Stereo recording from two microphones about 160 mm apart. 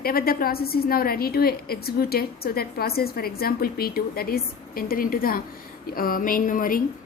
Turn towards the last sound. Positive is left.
turn(degrees=60)  # may be behind; listen again after turning